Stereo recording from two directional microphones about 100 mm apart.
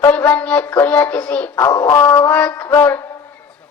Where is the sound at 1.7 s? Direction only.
25° left (ahead or behind).